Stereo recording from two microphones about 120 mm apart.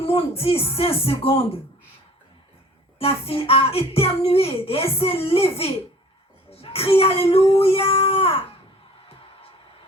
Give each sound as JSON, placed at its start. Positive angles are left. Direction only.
{"t": 0.0, "sound": "speech", "side_deg": 50}
{"t": 3.0, "sound": "speech", "side_deg": 55}